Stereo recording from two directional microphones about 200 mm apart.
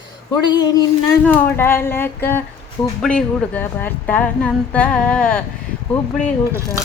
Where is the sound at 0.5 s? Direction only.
20° left (ahead or behind).